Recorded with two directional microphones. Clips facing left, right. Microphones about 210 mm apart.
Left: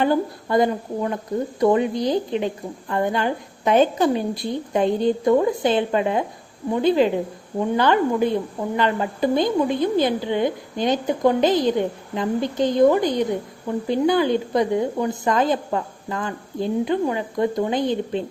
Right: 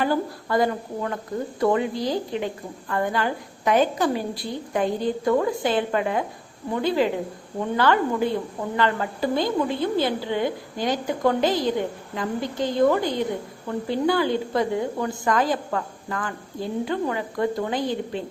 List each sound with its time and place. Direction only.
0.0 s a woman's voice: 20° left (ahead or behind)